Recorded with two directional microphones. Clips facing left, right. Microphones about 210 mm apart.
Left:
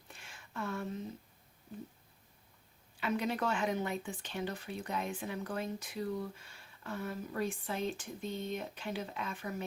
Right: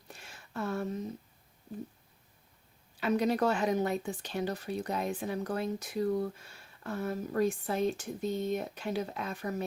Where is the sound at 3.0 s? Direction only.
40° right (ahead or behind).